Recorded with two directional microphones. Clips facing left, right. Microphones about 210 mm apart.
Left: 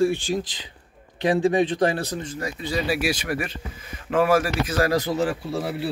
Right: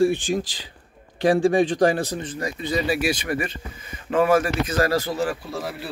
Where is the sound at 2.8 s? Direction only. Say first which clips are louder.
Right 1 dB; centre (ahead or behind).